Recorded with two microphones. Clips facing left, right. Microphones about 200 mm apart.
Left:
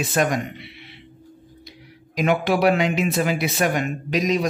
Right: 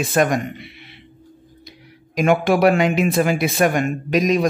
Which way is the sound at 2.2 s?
50° right (ahead or behind).